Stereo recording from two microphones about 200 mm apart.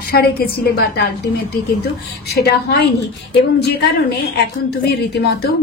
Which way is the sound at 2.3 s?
55° left (ahead or behind).